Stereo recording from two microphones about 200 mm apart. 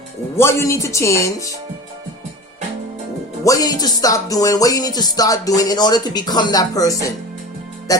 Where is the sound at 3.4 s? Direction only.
20° left (ahead or behind).